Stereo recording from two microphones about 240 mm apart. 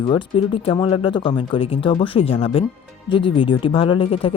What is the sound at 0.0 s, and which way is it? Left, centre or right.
Speech, centre.